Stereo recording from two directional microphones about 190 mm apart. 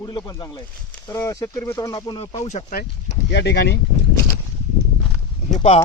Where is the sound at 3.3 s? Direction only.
60° left (ahead or behind).